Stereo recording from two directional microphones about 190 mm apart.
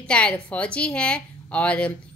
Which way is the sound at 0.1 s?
5° left (ahead or behind).